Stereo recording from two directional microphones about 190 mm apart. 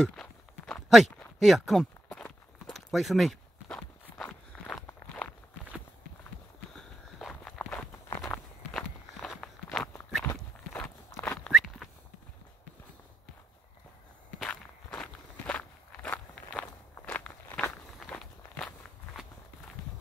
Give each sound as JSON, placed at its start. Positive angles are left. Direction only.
{"t": 0.0, "sound": "walk", "side_deg": 5}
{"t": 6.7, "sound": "walk", "side_deg": 0}
{"t": 11.5, "sound": "a sound", "side_deg": 0}
{"t": 14.4, "sound": "walk", "side_deg": 5}